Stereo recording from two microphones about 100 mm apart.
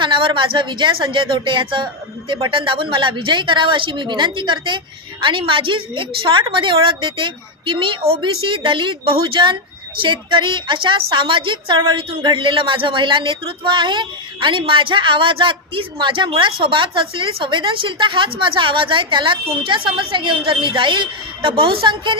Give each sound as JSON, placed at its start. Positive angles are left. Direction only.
{"t": 0.0, "sound": "speech", "side_deg": -60}